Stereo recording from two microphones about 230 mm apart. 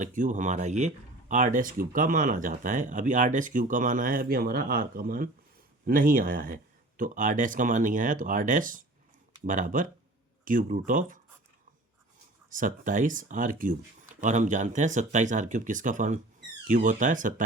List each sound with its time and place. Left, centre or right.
0.0 s speech: right
12.5 s speech: right